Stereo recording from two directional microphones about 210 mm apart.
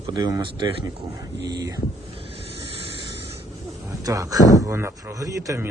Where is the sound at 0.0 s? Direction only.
20° right (ahead or behind).